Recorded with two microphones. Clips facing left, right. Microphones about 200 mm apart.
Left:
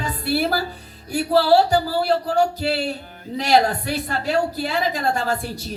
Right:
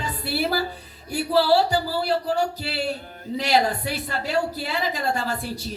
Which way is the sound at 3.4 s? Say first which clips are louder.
Left 4 dB; 45° left (ahead or behind).